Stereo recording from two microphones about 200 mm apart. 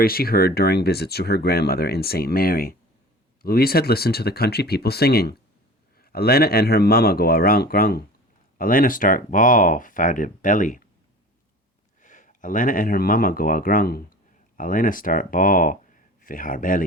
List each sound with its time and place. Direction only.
0.0 s speech: 50° left (ahead or behind)
12.0 s speech: 40° left (ahead or behind)